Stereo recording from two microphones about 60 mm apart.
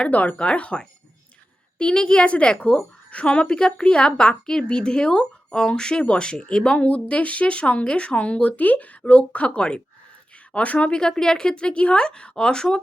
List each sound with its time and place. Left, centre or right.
0.0 s a woman's voice: left